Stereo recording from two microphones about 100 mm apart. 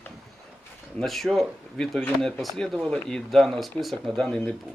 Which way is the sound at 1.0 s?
Centre (ahead or behind).